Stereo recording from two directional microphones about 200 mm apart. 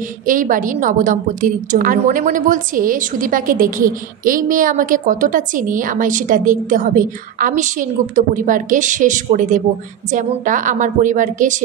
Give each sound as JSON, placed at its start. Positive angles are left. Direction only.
{"t": 0.3, "sound": "a woman's voice", "side_deg": -40}